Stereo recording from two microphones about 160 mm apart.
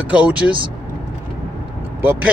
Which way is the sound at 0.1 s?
10° right (ahead or behind).